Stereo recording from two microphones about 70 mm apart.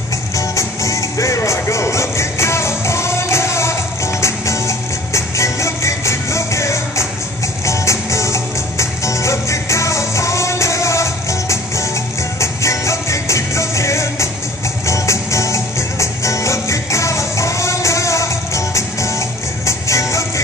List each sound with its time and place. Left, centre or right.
0.4 s music: left